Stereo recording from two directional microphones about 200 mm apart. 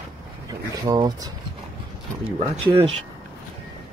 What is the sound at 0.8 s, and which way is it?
Speech, 20° right (ahead or behind).